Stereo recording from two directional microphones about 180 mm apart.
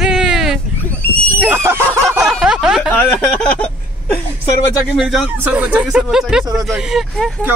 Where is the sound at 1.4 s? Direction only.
10° right (ahead or behind).